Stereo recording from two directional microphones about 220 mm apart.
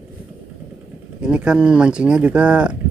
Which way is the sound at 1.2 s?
5° right (ahead or behind).